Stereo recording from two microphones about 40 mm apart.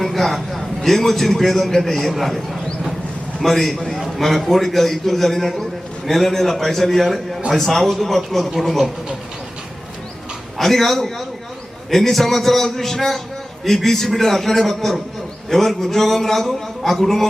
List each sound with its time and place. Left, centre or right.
0.0 s a man's voice: centre
10.6 s a man's voice: centre